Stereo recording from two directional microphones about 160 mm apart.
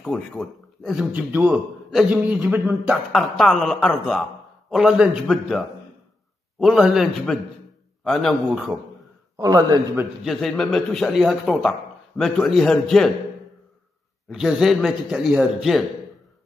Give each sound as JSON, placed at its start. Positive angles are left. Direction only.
{"t": 0.0, "sound": "speech", "side_deg": 0}
{"t": 1.3, "sound": "a man's voice", "side_deg": -10}
{"t": 3.1, "sound": "speech", "side_deg": 0}
{"t": 9.4, "sound": "a man's voice", "side_deg": -20}
{"t": 10.2, "sound": "speech", "side_deg": 0}
{"t": 14.3, "sound": "speech", "side_deg": 0}